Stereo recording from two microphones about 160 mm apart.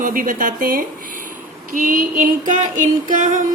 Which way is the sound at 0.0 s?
60° right (ahead or behind).